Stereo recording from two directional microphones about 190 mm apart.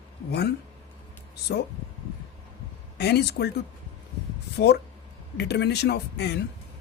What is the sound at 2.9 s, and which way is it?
Speech, 60° left (ahead or behind).